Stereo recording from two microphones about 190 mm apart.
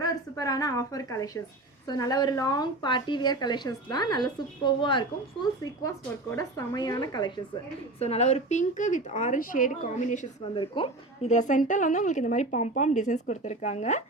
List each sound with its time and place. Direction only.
0.0 s a woman's voice: 20° left (ahead or behind)
7.9 s a woman's voice: 35° left (ahead or behind)
10.5 s a woman's voice: 25° left (ahead or behind)